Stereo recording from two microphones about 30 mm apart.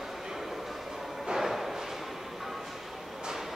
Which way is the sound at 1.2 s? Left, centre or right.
Centre.